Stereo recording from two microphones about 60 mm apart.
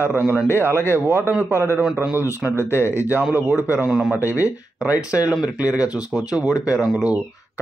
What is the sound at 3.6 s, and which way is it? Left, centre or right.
Speech, right.